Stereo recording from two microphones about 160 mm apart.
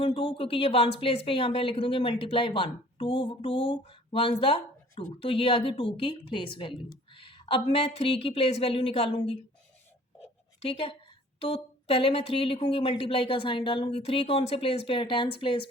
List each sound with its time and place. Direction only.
0.0 s speech: 30° left (ahead or behind)
10.6 s speech: 35° left (ahead or behind)